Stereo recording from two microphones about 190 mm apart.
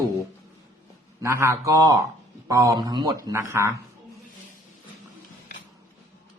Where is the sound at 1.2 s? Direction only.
15° right (ahead or behind).